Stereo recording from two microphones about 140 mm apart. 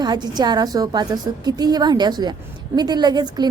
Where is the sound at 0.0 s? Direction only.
30° right (ahead or behind).